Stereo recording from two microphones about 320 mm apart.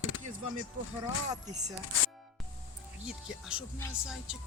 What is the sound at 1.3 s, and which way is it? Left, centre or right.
Speech, right.